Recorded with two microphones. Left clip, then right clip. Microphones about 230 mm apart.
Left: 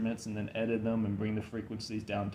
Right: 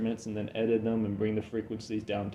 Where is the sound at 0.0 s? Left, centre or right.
Left.